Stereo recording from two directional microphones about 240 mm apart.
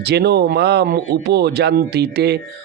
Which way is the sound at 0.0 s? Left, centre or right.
Right.